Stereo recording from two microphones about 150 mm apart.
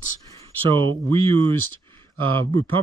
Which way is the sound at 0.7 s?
35° right (ahead or behind).